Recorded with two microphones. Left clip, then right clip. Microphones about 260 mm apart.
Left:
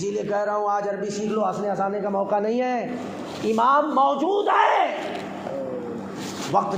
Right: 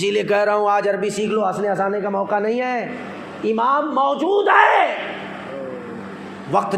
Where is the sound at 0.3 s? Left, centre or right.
Right.